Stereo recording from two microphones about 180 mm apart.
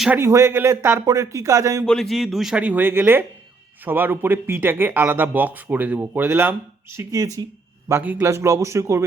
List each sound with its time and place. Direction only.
0.0 s speech: 10° right (ahead or behind)
1.8 s speech: 5° left (ahead or behind); by 9.0 s 15° right (ahead or behind)